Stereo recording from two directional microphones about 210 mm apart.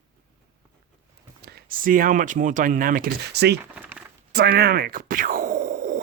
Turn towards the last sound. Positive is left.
turn(degrees=-40)  # may be behind; listen again after turning